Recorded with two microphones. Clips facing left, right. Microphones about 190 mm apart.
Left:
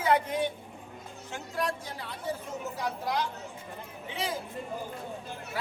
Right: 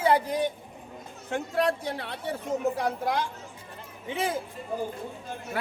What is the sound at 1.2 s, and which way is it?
A man's voice, 60° right (ahead or behind).